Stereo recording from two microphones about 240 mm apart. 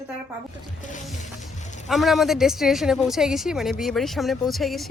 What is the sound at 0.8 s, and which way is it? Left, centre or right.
Music, left.